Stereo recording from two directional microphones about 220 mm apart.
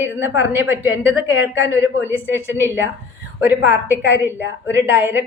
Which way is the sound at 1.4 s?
60° left (ahead or behind).